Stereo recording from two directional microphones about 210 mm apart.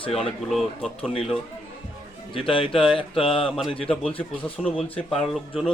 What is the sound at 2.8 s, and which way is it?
Speech, centre (ahead or behind).